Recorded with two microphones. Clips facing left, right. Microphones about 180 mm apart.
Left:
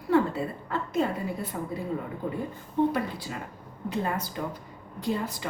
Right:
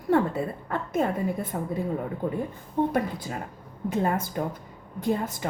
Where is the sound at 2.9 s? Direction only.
45° right (ahead or behind).